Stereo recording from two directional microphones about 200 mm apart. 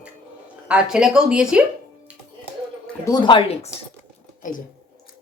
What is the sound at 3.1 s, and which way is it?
Speech, 25° left (ahead or behind).